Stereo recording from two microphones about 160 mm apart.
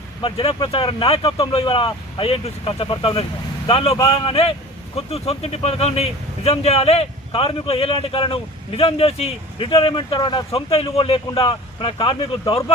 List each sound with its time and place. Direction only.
0.2 s speech: 35° left (ahead or behind)